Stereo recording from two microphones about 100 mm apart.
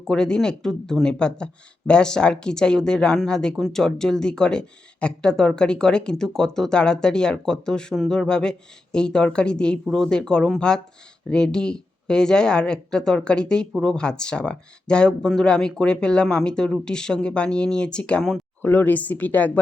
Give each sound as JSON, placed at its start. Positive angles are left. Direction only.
{"t": 0.1, "sound": "speech", "side_deg": 5}
{"t": 18.6, "sound": "speech", "side_deg": 20}